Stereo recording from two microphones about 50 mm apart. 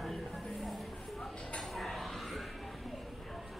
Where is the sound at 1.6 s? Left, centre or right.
Centre.